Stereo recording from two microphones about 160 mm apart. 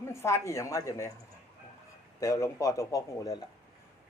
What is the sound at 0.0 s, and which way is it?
Speech, 15° left (ahead or behind).